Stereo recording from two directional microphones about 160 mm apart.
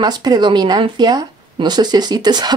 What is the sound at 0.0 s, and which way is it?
Speech, 25° right (ahead or behind).